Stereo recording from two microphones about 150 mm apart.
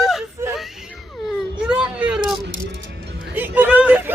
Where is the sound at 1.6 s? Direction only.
5° right (ahead or behind).